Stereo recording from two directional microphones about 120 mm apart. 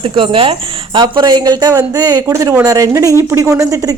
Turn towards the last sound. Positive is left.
turn(degrees=-30)  # may be behind; listen again after turning